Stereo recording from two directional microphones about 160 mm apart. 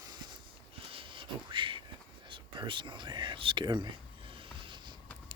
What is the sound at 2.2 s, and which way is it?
Speech, 30° right (ahead or behind).